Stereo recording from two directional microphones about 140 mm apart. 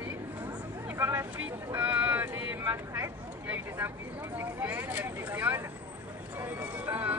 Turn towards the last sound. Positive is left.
turn(degrees=-10)  # may be behind; listen again after turning